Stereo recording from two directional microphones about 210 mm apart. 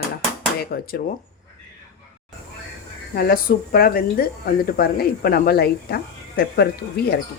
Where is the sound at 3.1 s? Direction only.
45° left (ahead or behind).